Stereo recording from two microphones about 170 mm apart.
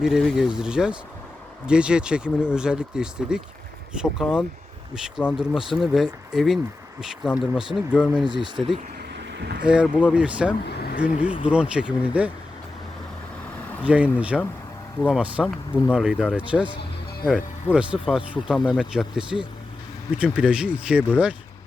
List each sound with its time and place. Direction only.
0.0 s speech: centre (ahead or behind)
8.3 s speech: 25° right (ahead or behind)
9.4 s speech: 70° right (ahead or behind)
9.6 s speech: 5° right (ahead or behind)
10.7 s vehicle: 70° left (ahead or behind)
10.9 s speech: 5° right (ahead or behind)
13.8 s speech: 10° right (ahead or behind)